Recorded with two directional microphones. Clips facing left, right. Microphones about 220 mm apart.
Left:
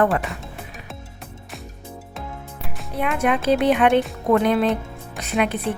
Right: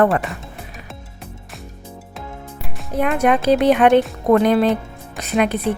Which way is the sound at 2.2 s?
Centre (ahead or behind).